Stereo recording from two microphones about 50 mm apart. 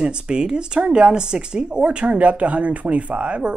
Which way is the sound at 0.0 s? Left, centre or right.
Centre.